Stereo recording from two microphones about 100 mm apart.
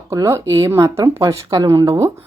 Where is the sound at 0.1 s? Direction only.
35° right (ahead or behind).